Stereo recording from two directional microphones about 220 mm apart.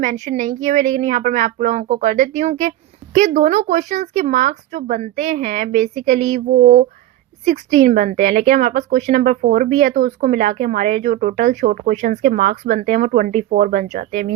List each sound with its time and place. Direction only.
0.0 s speech: 35° right (ahead or behind)